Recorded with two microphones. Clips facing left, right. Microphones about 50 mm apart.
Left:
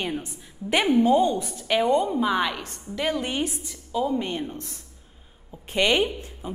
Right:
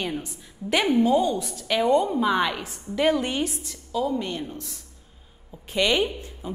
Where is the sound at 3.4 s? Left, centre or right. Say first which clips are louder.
Even; left.